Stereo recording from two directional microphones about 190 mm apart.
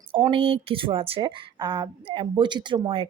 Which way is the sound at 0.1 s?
25° right (ahead or behind).